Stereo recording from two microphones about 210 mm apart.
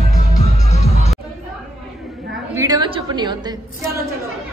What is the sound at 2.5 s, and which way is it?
A woman's voice, 15° right (ahead or behind).